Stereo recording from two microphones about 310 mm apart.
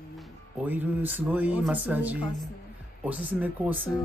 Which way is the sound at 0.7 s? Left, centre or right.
Centre.